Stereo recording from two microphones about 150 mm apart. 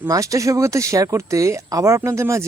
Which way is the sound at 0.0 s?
20° right (ahead or behind).